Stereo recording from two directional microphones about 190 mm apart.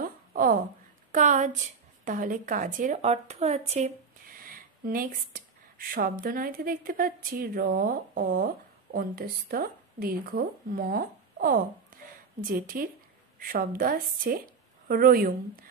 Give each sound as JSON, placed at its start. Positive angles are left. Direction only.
{"t": 0.0, "sound": "a sound", "side_deg": -50}
{"t": 2.0, "sound": "a woman's voice", "side_deg": -45}
{"t": 4.3, "sound": "a woman's voice", "side_deg": -50}